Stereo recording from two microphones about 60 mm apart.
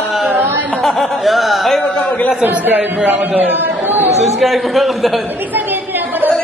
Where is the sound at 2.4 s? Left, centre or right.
Right.